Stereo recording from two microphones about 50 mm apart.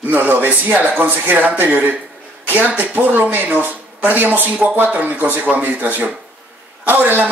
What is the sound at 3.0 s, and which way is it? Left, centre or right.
Speech, right.